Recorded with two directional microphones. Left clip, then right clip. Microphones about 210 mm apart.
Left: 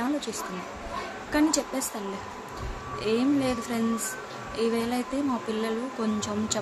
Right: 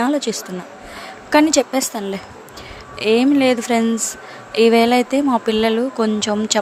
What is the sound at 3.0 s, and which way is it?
A woman's voice, 40° right (ahead or behind).